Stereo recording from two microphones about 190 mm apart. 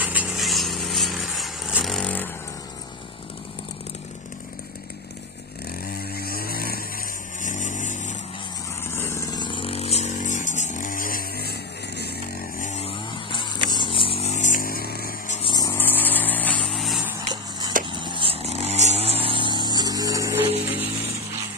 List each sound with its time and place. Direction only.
0.0 s a sound: 10° right (ahead or behind); by 2.3 s 10° left (ahead or behind)
5.9 s chainsaw: 50° left (ahead or behind)
7.4 s vehicle: 40° left (ahead or behind)
8.9 s vehicle: 15° left (ahead or behind); by 11.5 s 50° left (ahead or behind)
12.5 s chainsaw: 40° left (ahead or behind)
13.7 s a sound: 25° left (ahead or behind); by 15.3 s 50° left (ahead or behind)
15.5 s vehicle: 15° left (ahead or behind)
17.3 s a sound: 20° right (ahead or behind)
17.8 s vehicle: 25° right (ahead or behind); by 20.8 s 10° right (ahead or behind)